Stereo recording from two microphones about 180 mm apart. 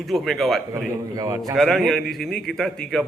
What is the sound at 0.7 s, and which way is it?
Speech, 20° right (ahead or behind).